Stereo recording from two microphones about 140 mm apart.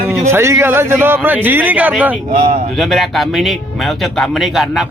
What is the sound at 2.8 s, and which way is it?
Speech, centre (ahead or behind).